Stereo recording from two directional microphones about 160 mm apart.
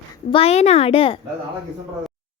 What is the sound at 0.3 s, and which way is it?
Speech, 35° left (ahead or behind).